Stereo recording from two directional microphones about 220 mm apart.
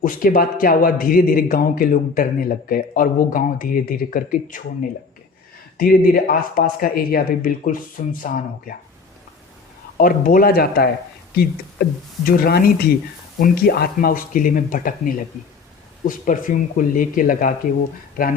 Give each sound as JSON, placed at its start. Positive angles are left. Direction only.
{"t": 0.0, "sound": "a man's voice", "side_deg": 40}
{"t": 5.7, "sound": "a man's voice", "side_deg": 40}
{"t": 10.0, "sound": "a man's voice", "side_deg": 40}
{"t": 16.0, "sound": "a man's voice", "side_deg": 35}